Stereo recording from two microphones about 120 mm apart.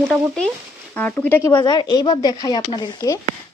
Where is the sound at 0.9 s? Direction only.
15° left (ahead or behind).